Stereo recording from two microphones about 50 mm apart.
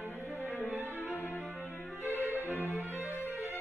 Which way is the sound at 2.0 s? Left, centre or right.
Right.